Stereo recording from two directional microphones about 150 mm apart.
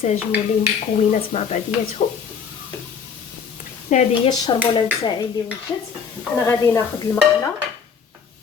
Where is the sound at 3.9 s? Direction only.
55° left (ahead or behind).